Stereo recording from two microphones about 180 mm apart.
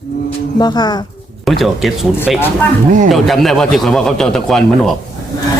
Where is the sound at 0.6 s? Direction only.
25° left (ahead or behind).